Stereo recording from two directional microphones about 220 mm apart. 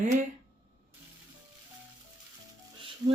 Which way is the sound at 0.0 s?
30° right (ahead or behind).